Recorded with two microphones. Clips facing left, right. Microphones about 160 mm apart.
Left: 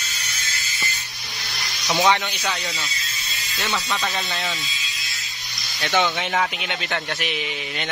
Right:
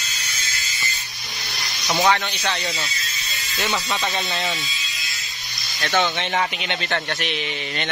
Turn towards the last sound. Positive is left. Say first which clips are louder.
# right 1 dB
turn(degrees=5)  # may be behind; listen again after turning